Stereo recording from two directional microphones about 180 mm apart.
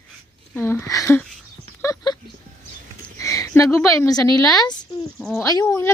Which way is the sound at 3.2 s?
20° left (ahead or behind).